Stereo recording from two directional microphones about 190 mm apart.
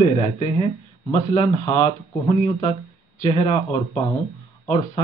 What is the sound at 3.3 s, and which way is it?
Speech, 30° left (ahead or behind).